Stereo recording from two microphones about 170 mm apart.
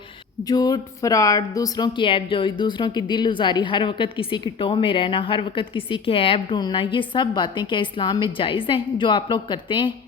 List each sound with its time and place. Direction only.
0.4 s a woman's voice: 20° left (ahead or behind)